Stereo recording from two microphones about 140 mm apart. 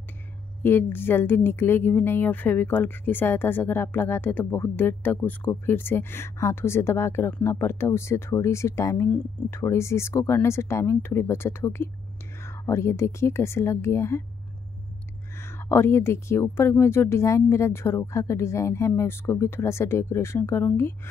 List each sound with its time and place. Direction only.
0.6 s speech: 15° left (ahead or behind)
15.3 s speech: 15° left (ahead or behind)